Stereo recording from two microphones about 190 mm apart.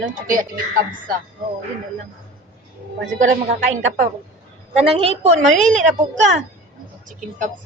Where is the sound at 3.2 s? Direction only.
40° right (ahead or behind).